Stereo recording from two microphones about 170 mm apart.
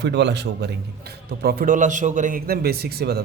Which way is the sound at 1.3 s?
70° right (ahead or behind).